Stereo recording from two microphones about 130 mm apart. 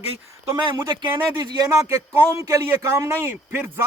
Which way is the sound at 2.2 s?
25° right (ahead or behind).